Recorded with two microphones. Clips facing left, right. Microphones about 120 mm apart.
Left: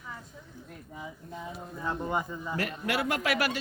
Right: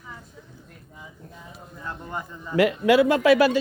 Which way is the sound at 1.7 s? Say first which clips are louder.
Left 4 dB; 20° left (ahead or behind).